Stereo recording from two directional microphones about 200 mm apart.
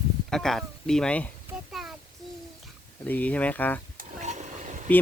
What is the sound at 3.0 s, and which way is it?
Speech, 5° left (ahead or behind).